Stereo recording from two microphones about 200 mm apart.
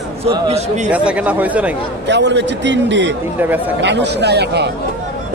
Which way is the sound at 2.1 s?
60° right (ahead or behind).